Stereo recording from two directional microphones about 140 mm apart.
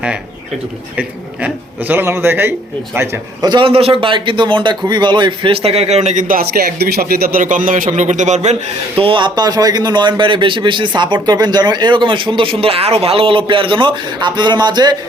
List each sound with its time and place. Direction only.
0.9 s a man's voice: 10° right (ahead or behind)
3.5 s a man's voice: 40° right (ahead or behind)
9.0 s a man's voice: 35° right (ahead or behind)